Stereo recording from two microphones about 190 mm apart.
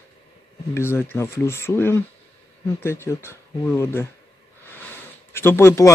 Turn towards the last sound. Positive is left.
turn(degrees=15)  # may be behind; listen again after turning